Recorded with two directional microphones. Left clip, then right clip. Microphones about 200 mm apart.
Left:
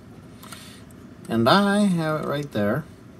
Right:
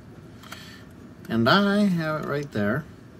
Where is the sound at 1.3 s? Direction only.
10° left (ahead or behind).